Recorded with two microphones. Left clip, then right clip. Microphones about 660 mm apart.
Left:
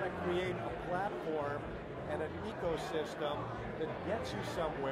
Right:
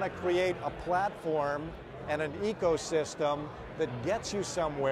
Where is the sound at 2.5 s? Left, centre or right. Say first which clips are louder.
Right 9 dB; right.